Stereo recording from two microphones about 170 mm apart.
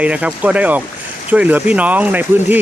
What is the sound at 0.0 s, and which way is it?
Speech, 5° right (ahead or behind).